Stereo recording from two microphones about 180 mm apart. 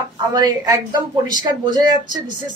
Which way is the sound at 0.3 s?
25° right (ahead or behind).